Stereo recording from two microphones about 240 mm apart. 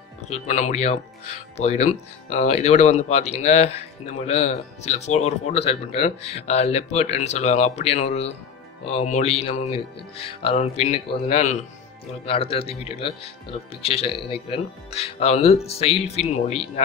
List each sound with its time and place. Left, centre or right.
0.3 s speech: left